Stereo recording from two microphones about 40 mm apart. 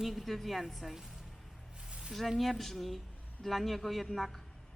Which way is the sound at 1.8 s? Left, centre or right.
Centre.